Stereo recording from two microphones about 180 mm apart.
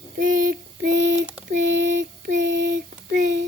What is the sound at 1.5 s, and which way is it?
Child singing, 45° right (ahead or behind).